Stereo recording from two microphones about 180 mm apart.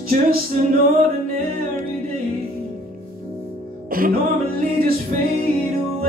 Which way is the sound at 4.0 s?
50° right (ahead or behind).